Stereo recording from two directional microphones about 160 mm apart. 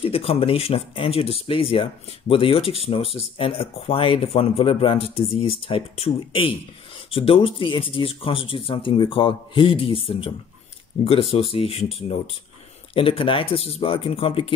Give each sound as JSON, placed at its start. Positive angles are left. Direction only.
{"t": 0.0, "sound": "speech", "side_deg": 35}